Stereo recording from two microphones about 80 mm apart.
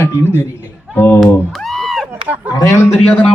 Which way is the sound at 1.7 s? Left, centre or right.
Centre.